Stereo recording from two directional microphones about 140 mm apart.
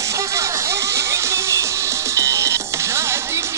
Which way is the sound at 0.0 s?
20° right (ahead or behind).